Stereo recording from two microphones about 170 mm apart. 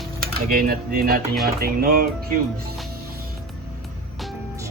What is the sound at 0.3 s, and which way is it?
Cutlery, 60° right (ahead or behind).